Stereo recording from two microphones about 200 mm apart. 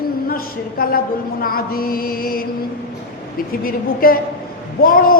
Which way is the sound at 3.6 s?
45° left (ahead or behind).